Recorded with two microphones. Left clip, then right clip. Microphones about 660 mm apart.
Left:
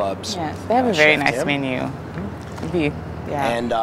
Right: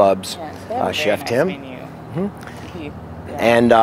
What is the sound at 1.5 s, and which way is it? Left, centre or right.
Speech, left.